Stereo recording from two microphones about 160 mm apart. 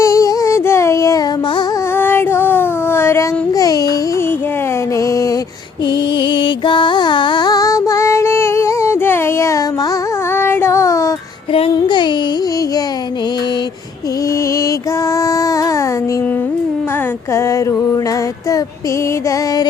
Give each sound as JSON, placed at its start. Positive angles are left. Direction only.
{"t": 0.0, "sound": "music", "side_deg": 20}
{"t": 4.9, "sound": "a sound", "side_deg": 20}
{"t": 6.1, "sound": "music", "side_deg": 30}
{"t": 10.3, "sound": "child singing", "side_deg": 15}
{"t": 11.5, "sound": "music", "side_deg": 30}
{"t": 15.1, "sound": "child singing", "side_deg": 20}
{"t": 17.3, "sound": "music", "side_deg": 20}